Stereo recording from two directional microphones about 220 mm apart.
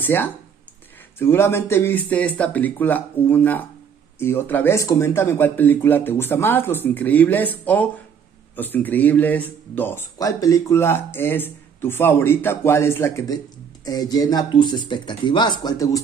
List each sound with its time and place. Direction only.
0.0 s speech: 10° left (ahead or behind)